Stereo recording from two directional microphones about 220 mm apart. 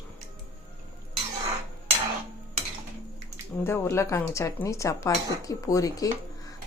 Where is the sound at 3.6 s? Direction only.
10° left (ahead or behind).